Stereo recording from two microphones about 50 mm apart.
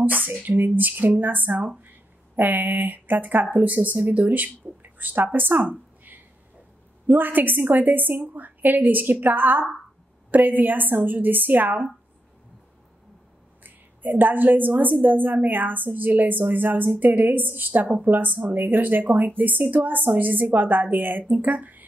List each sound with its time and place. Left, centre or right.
0.0 s a woman's voice: right
13.7 s a woman's voice: right